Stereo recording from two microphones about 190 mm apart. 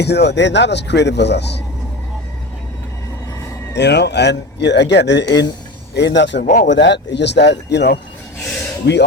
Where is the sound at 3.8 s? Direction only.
65° left (ahead or behind).